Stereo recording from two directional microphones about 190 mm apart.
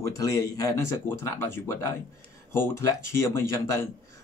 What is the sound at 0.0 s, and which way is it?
Speech, 20° left (ahead or behind).